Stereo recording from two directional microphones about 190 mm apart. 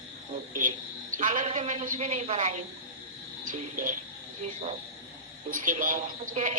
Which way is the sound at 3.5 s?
45° right (ahead or behind).